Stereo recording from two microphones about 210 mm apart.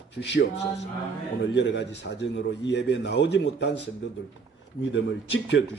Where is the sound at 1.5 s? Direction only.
60° left (ahead or behind).